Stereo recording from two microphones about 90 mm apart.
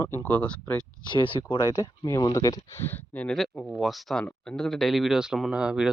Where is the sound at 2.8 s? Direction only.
20° left (ahead or behind).